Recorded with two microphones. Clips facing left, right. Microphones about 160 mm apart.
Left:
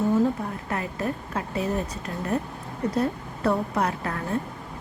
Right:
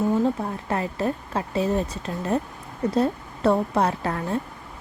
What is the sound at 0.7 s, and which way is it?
A woman's voice, 30° right (ahead or behind).